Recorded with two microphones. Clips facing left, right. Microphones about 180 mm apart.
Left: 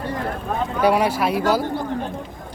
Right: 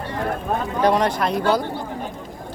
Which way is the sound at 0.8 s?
10° left (ahead or behind).